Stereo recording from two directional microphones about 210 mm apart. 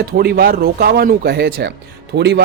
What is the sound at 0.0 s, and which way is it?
Speech, 50° right (ahead or behind).